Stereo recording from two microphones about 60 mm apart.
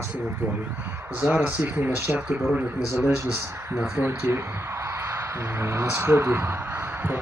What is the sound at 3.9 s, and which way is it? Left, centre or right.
A man's voice, right.